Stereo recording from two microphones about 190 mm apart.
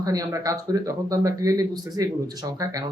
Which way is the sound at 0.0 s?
20° right (ahead or behind).